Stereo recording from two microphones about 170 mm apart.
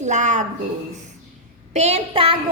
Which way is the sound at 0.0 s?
45° right (ahead or behind).